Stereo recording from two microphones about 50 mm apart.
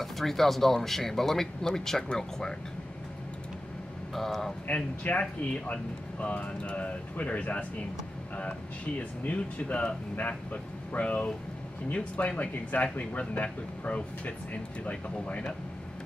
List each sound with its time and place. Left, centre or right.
0.0 s speech: centre
4.1 s speech: centre
4.6 s speech: left